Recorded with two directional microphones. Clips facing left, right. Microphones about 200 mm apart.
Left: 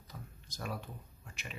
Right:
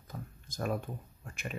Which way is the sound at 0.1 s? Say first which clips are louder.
Right 6 dB; 50° right (ahead or behind).